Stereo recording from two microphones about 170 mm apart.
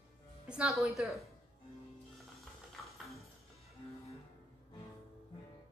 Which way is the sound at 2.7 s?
Centre (ahead or behind).